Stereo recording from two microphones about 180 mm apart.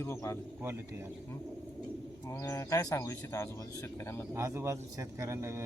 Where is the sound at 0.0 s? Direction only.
15° left (ahead or behind).